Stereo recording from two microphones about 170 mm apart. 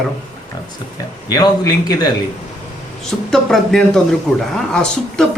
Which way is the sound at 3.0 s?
5° left (ahead or behind).